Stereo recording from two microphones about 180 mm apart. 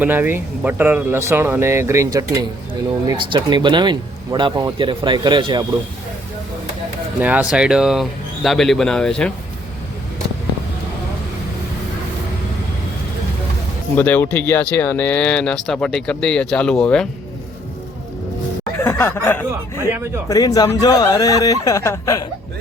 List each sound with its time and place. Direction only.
0.0 s speech: 10° right (ahead or behind)
7.2 s speech: 5° right (ahead or behind)
13.9 s speech: 10° left (ahead or behind)
18.8 s speech: 15° left (ahead or behind)